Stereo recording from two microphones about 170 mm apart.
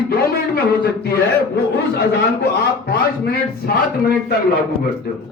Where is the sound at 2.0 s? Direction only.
75° left (ahead or behind).